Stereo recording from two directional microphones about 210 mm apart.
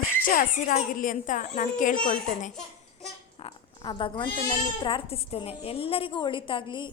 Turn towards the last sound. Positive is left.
turn(degrees=20)  # may be behind; listen again after turning